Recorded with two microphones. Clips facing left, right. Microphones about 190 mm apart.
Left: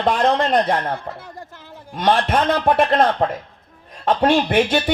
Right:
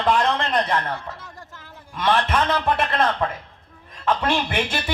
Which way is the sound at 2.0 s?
35° left (ahead or behind).